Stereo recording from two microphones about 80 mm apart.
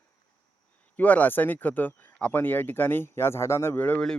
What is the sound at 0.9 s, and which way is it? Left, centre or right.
Speech, centre.